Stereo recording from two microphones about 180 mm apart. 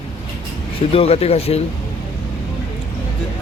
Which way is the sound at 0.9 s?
35° left (ahead or behind).